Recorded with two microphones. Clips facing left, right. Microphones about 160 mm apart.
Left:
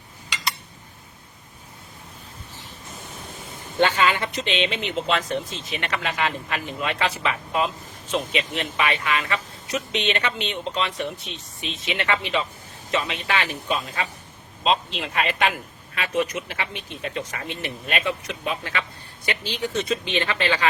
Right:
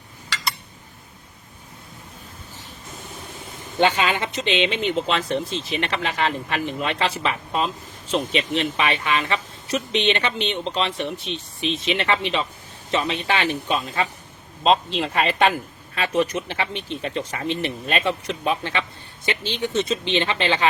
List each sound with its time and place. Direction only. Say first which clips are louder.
3.8 s speech: right 1 dB; 20° right (ahead or behind)
4.8 s speech: right 2 dB; 35° right (ahead or behind)